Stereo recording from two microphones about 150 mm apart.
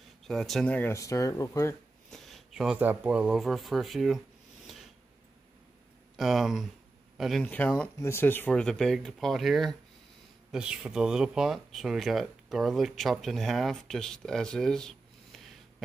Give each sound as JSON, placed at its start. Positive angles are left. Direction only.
{"t": 0.2, "sound": "speech", "side_deg": 0}
{"t": 2.0, "sound": "speech", "side_deg": 0}
{"t": 6.1, "sound": "speech", "side_deg": 0}